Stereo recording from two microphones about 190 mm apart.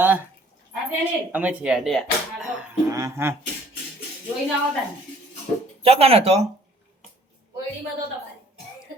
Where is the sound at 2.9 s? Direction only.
15° right (ahead or behind).